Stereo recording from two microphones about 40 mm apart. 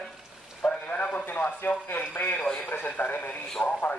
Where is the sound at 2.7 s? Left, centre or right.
Left.